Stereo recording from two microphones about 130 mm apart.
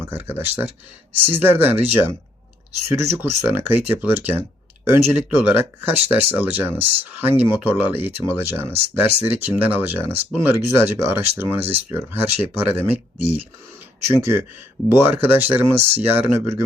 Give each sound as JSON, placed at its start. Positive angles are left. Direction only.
{"t": 0.0, "sound": "speech", "side_deg": -15}